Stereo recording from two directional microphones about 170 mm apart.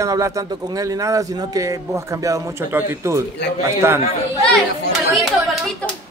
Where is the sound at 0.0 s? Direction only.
20° right (ahead or behind).